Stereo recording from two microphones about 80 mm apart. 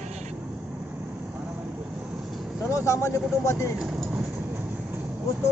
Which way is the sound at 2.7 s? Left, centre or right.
Left.